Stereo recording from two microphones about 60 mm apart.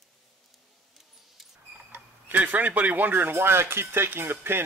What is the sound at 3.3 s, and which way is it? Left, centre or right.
Speech, right.